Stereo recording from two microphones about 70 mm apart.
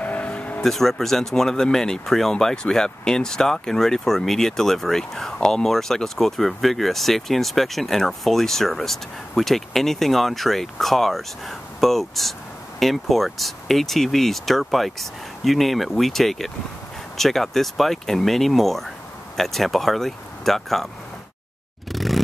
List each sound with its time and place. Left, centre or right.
0.0 s vehicle: left
0.6 s speech: centre
21.9 s vehicle: centre